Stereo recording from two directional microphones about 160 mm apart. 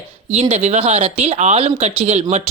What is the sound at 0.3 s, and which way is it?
Speech, 40° right (ahead or behind).